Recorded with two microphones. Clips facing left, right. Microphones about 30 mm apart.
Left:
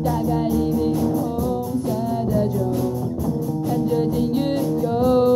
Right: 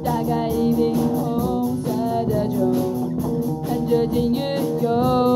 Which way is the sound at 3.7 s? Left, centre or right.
Right.